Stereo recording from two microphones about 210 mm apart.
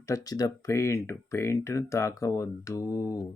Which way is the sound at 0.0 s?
15° left (ahead or behind).